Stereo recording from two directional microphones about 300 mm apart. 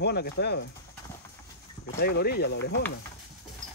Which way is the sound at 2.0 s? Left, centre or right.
Left.